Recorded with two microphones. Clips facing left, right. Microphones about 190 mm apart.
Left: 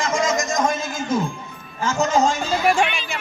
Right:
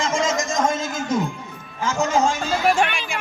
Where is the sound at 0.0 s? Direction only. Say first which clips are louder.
Left 1 dB; 25° right (ahead or behind).